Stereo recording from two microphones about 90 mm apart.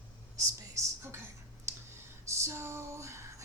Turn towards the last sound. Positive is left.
turn(degrees=-35)  # may be behind; listen again after turning